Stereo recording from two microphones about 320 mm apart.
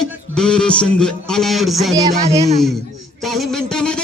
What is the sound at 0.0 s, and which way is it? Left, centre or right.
A man's voice, centre.